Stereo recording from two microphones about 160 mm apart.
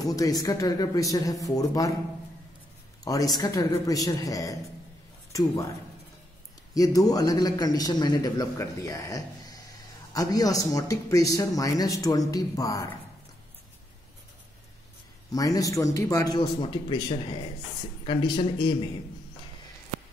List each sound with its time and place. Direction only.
0.0 s a man's voice: 25° left (ahead or behind)
3.0 s a man's voice: 20° left (ahead or behind)
6.7 s a man's voice: 20° left (ahead or behind)
15.3 s a man's voice: 20° left (ahead or behind)